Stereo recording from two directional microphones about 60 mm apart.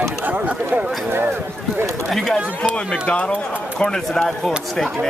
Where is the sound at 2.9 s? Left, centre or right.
Centre.